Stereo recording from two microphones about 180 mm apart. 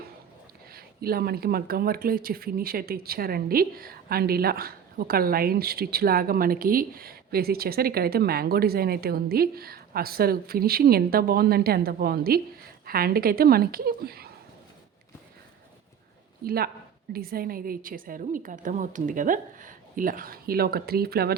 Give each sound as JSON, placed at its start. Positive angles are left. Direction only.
{"t": 0.7, "sound": "speech", "side_deg": -55}
{"t": 16.4, "sound": "a woman's voice", "side_deg": -55}